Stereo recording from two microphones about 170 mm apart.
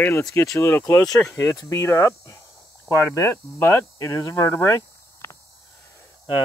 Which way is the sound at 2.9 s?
15° left (ahead or behind).